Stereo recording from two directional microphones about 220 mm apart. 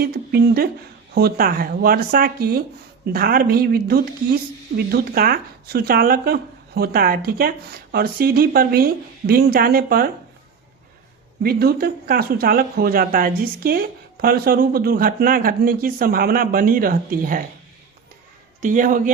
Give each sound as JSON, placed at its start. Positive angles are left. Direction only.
{"t": 0.0, "sound": "speech", "side_deg": -45}
{"t": 11.4, "sound": "speech", "side_deg": -45}
{"t": 18.6, "sound": "speech", "side_deg": -35}